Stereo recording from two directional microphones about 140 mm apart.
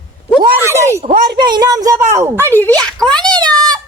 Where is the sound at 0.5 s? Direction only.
20° right (ahead or behind).